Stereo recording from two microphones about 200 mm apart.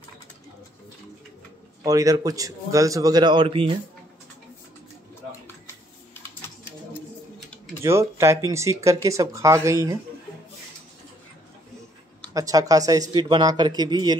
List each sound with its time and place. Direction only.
1.9 s speech: 20° right (ahead or behind)
7.8 s speech: 15° right (ahead or behind)
12.4 s a man's voice: 15° right (ahead or behind)